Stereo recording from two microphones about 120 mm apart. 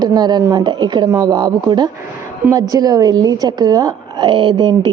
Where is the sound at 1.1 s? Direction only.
25° right (ahead or behind).